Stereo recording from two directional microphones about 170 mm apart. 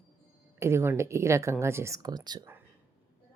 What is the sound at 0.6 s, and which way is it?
Speech, 15° right (ahead or behind).